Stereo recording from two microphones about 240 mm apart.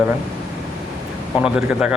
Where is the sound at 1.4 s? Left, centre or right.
Centre.